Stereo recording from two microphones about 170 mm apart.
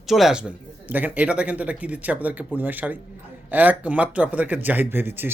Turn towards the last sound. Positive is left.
turn(degrees=-10)  # may be behind; listen again after turning